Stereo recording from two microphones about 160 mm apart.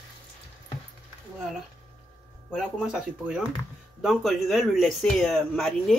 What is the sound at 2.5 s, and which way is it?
A man's voice, 5° right (ahead or behind).